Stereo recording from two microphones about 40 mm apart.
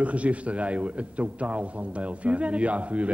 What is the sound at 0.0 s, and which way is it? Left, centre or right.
A man's voice, right.